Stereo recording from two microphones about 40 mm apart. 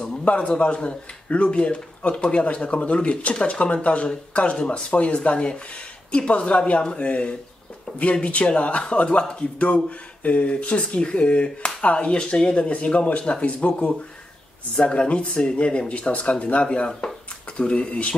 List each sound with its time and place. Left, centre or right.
0.2 s speech: left
4.6 s speech: left
4.9 s a man's voice: left
14.8 s a man's voice: left
16.6 s speech: left